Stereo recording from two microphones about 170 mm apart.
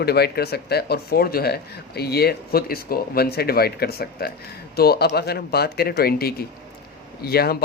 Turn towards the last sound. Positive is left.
turn(degrees=65)  # may be behind; listen again after turning